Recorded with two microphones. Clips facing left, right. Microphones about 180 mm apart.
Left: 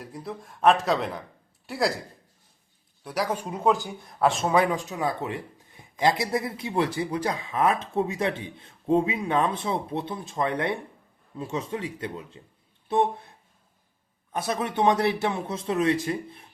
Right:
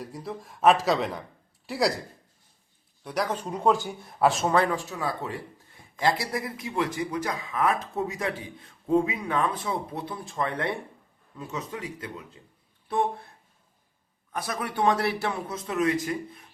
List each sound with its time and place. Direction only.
0.0 s speech: centre (ahead or behind)
3.0 s speech: 5° left (ahead or behind)
4.5 s a man's voice: 15° left (ahead or behind)
14.3 s a man's voice: 25° left (ahead or behind)